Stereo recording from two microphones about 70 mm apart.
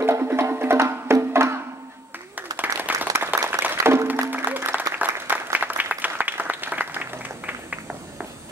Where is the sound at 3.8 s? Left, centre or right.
Right.